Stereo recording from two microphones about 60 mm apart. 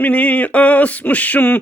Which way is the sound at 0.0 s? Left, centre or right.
Left.